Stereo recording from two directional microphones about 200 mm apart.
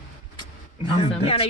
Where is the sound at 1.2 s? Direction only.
30° left (ahead or behind).